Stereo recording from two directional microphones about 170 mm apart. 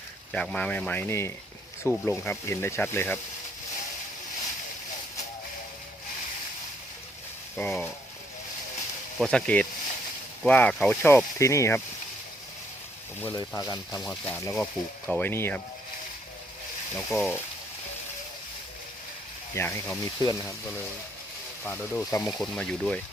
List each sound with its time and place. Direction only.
0.3 s speech: 5° left (ahead or behind)
7.5 s speech: centre (ahead or behind)
9.1 s speech: 5° left (ahead or behind)
13.2 s speech: 15° left (ahead or behind)
14.5 s speech: 5° left (ahead or behind)
16.9 s speech: 5° left (ahead or behind)
19.5 s speech: 15° left (ahead or behind)
22.3 s speech: centre (ahead or behind)